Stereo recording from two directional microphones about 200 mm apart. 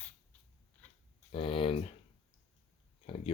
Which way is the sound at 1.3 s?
25° left (ahead or behind).